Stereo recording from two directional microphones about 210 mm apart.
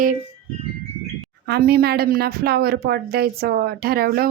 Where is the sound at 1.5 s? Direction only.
50° right (ahead or behind).